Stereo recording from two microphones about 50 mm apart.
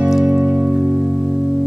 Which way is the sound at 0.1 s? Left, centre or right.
Centre.